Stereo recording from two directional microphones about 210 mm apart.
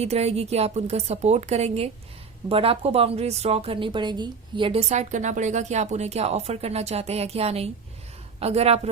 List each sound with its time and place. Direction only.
0.0 s a woman's voice: 30° right (ahead or behind)